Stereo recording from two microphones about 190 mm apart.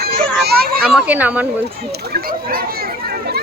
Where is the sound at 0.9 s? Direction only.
10° right (ahead or behind).